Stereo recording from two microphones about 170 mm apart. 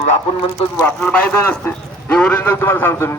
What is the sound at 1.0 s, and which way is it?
A man's voice, 10° left (ahead or behind).